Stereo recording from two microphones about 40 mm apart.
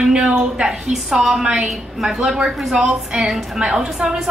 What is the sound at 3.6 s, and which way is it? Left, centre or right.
Speech, right.